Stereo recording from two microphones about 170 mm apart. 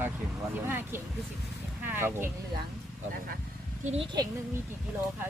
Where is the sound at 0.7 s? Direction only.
15° right (ahead or behind).